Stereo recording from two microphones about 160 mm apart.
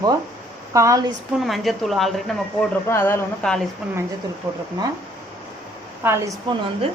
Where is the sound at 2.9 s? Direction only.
15° left (ahead or behind).